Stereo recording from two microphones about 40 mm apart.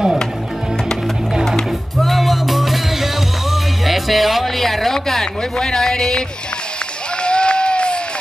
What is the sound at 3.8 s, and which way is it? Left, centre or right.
Speech, centre.